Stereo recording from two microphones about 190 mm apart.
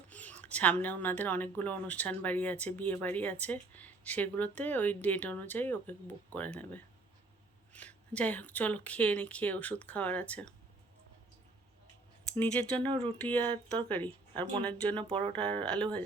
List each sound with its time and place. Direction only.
0.1 s a sound: 10° left (ahead or behind)
0.4 s speech: 10° left (ahead or behind)
12.3 s speech: 10° left (ahead or behind)
12.8 s speech: 30° right (ahead or behind)
13.2 s speech: 10° left (ahead or behind)
15.0 s speech: 30° right (ahead or behind)
15.6 s speech: 5° left (ahead or behind)